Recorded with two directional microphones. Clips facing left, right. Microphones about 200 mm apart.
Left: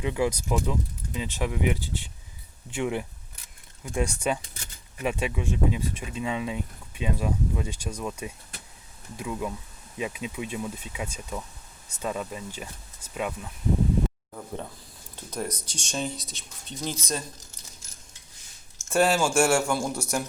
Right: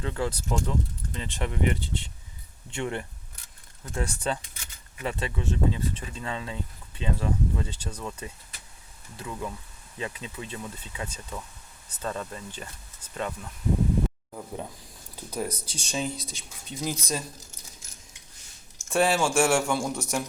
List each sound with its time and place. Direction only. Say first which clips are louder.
0.0 s speech: left 4 dB; 15° left (ahead or behind)
14.3 s speech: even; 10° right (ahead or behind)
15.5 s speech: right 1 dB; 30° right (ahead or behind)
15.8 s speech: right 1 dB; 5° right (ahead or behind)
18.9 s speech: left 1 dB; centre (ahead or behind)